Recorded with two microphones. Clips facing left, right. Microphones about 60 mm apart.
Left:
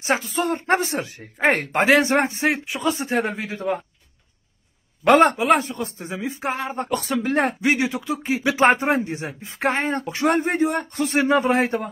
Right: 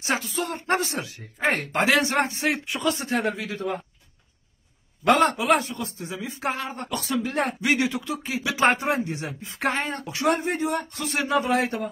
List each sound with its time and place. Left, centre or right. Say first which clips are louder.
0.0 s speech: left 4 dB; left
5.0 s speech: left 4 dB; left